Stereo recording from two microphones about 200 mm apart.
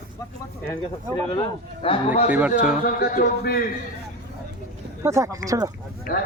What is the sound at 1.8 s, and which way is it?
Speech, 30° left (ahead or behind).